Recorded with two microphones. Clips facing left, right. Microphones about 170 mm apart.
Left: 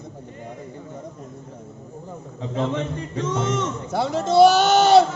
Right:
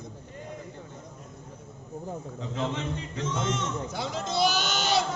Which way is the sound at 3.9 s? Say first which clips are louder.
Left 10 dB; 70° left (ahead or behind).